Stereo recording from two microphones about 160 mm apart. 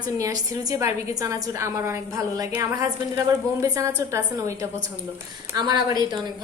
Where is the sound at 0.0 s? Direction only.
20° right (ahead or behind).